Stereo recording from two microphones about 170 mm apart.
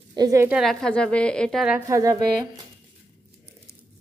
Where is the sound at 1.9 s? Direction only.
20° right (ahead or behind).